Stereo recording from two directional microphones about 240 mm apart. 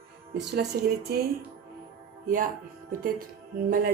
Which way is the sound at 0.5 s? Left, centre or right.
Right.